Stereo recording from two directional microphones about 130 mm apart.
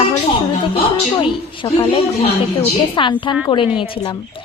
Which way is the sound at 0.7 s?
45° left (ahead or behind).